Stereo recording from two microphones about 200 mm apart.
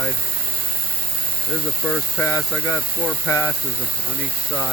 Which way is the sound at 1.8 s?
10° left (ahead or behind).